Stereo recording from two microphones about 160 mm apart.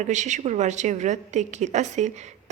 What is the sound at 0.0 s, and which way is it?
A woman's voice, 50° right (ahead or behind).